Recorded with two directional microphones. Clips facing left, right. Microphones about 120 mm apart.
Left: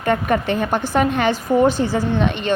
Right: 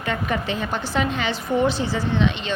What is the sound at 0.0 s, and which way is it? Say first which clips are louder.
A woman's voice: left 6 dB; 50° left (ahead or behind).